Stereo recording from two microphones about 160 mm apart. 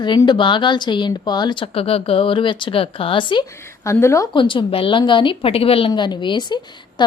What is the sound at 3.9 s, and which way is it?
Speech, 15° left (ahead or behind).